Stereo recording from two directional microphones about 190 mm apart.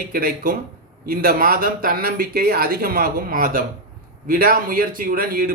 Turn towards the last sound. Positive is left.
turn(degrees=-50)  # may be behind; listen again after turning